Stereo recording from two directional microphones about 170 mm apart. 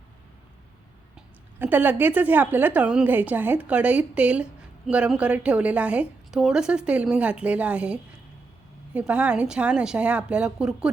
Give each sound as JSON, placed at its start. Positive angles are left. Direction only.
{"t": 1.1, "sound": "speech", "side_deg": -10}